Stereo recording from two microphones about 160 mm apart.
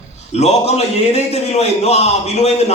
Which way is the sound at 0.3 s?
45° left (ahead or behind).